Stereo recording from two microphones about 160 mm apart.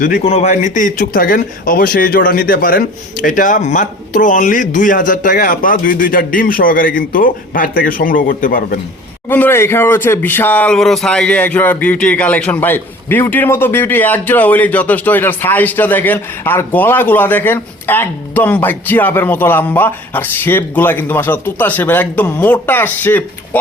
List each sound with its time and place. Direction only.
0.3 s speech: 45° left (ahead or behind); by 8.8 s 60° left (ahead or behind)
9.3 s speech: 15° left (ahead or behind)